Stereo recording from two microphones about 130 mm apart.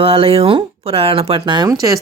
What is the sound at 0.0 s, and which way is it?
Speech, 45° right (ahead or behind).